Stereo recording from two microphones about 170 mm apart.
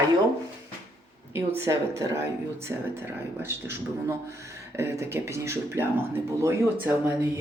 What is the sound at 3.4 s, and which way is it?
Speech, 15° right (ahead or behind).